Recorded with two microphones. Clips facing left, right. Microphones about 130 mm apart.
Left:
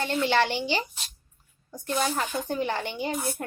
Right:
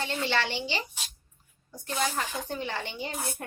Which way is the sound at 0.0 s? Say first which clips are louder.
Left 5 dB; 50° left (ahead or behind).